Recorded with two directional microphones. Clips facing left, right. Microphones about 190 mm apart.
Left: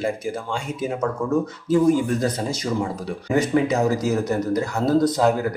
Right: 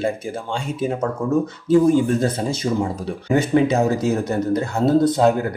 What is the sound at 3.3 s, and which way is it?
A man's voice, 25° right (ahead or behind).